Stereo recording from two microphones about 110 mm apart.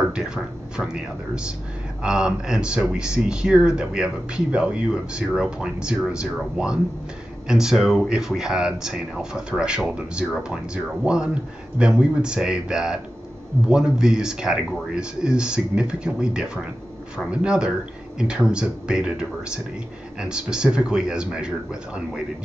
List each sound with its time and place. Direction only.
0.0 s speech: 5° right (ahead or behind)